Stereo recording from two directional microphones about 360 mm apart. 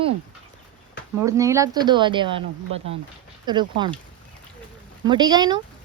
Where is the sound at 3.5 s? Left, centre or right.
Centre.